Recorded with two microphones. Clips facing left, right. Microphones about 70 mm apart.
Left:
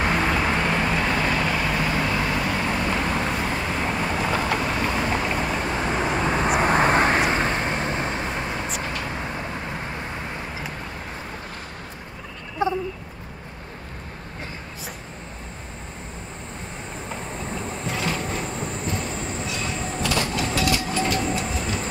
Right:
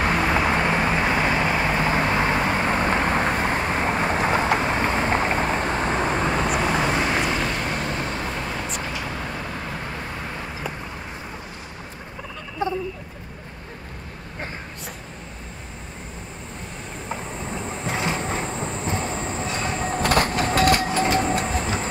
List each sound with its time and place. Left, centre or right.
0.0 s vehicle: centre; by 6.2 s right
6.2 s vehicle: left
17.1 s train: centre; by 21.6 s right